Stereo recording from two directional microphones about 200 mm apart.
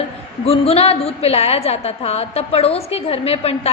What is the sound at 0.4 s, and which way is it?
A woman's voice, 30° left (ahead or behind).